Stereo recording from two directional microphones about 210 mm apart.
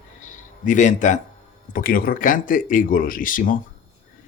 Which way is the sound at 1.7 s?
45° left (ahead or behind).